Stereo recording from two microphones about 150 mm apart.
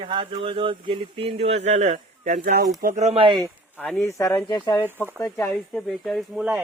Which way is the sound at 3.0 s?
40° right (ahead or behind).